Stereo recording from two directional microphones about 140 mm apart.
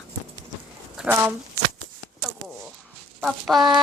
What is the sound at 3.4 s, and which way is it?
Speech, centre (ahead or behind).